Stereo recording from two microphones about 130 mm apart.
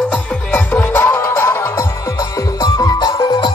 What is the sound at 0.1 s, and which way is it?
Music, 15° left (ahead or behind).